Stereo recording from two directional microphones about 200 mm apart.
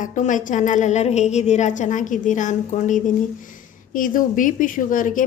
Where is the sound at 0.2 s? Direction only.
40° left (ahead or behind).